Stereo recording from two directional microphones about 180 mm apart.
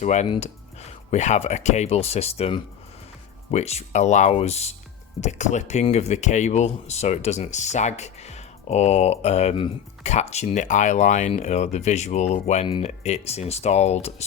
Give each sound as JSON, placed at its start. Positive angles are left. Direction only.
{"t": 0.0, "sound": "speech", "side_deg": 40}
{"t": 12.6, "sound": "speech", "side_deg": 25}
{"t": 12.9, "sound": "speech", "side_deg": 40}